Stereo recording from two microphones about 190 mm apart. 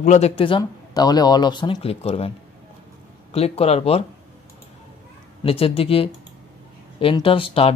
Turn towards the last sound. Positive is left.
turn(degrees=30)  # may be behind; listen again after turning